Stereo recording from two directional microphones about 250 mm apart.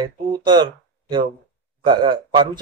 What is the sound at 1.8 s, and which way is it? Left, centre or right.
Speech, centre.